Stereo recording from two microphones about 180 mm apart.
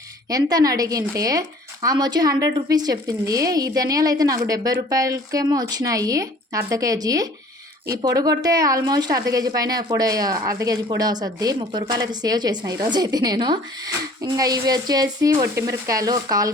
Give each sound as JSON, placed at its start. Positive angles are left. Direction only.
{"t": 0.3, "sound": "speech", "side_deg": -20}